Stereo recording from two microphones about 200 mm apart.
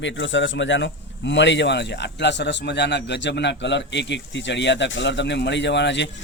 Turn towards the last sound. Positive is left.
turn(degrees=60)  # may be behind; listen again after turning